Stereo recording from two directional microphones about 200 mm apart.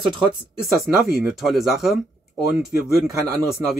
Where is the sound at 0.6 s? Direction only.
Centre (ahead or behind).